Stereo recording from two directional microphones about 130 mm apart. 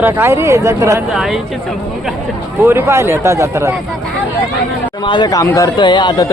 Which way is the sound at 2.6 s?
20° right (ahead or behind).